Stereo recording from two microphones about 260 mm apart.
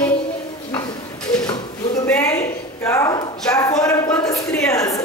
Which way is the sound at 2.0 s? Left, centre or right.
Centre.